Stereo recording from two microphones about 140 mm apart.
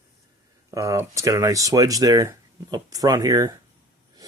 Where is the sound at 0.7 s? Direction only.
20° right (ahead or behind).